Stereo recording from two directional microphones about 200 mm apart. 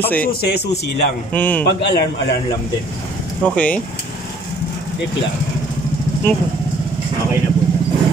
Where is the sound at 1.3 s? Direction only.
10° left (ahead or behind).